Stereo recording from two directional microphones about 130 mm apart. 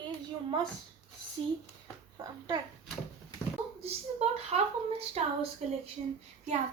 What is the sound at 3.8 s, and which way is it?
Speech, 50° right (ahead or behind).